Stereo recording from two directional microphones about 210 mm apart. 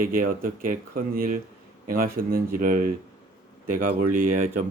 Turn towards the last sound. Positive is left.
turn(degrees=-40)  # may be behind; listen again after turning